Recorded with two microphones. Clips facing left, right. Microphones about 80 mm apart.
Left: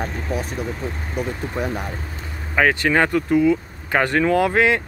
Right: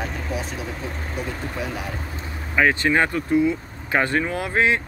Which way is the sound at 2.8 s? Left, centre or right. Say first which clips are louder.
Left 2 dB; left.